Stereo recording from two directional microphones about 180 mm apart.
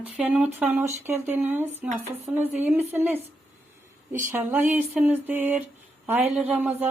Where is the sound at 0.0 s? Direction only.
10° right (ahead or behind).